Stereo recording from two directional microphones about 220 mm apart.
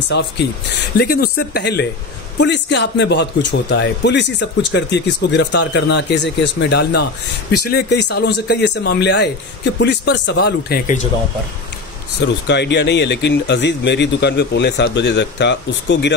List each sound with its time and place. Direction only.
0.1 s speech: 50° left (ahead or behind)
12.4 s speech: 50° left (ahead or behind)